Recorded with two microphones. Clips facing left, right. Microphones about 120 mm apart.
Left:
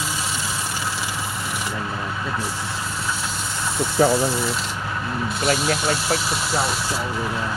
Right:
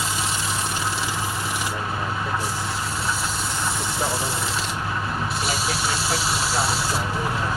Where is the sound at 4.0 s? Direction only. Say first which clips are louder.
Left 11 dB; 75° left (ahead or behind).